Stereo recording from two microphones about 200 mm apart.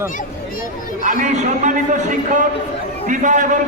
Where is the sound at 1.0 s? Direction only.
40° right (ahead or behind).